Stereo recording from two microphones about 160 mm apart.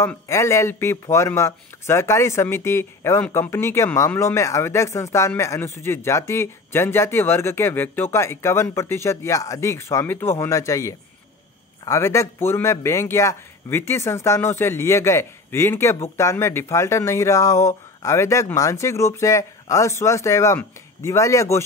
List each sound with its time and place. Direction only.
0.0 s a man's voice: 15° left (ahead or behind)